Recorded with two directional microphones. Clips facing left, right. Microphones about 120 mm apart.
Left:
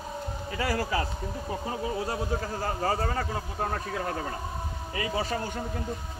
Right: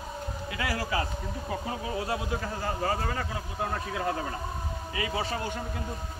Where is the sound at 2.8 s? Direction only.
35° left (ahead or behind).